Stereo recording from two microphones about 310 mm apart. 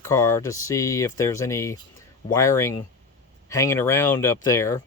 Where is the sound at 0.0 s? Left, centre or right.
Centre.